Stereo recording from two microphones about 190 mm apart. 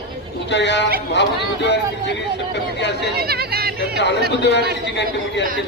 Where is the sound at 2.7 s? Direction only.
65° left (ahead or behind).